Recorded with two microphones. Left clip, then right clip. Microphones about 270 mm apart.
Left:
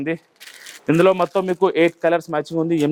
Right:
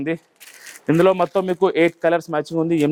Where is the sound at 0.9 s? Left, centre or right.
Left.